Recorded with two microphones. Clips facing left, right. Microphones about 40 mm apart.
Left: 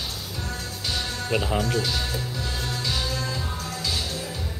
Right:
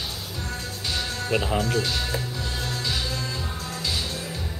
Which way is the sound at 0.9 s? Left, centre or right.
Centre.